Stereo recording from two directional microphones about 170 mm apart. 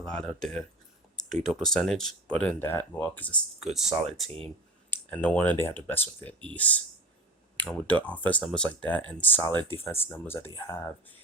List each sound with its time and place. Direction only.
0.0 s speech: 5° left (ahead or behind)
1.1 s a sound: centre (ahead or behind)
1.5 s speech: centre (ahead or behind)
4.3 s speech: 35° right (ahead or behind)
4.9 s speech: 10° left (ahead or behind)